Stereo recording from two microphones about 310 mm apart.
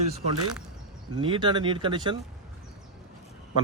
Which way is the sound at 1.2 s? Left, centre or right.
Centre.